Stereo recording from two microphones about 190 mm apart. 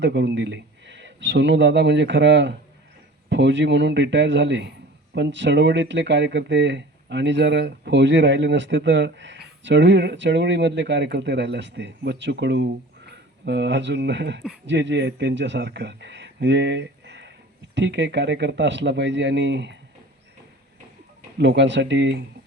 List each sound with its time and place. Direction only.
0.0 s speech: 65° right (ahead or behind)
21.3 s speech: 70° right (ahead or behind)